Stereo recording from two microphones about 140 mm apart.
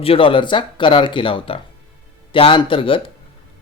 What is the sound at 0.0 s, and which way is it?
Speech, 40° left (ahead or behind).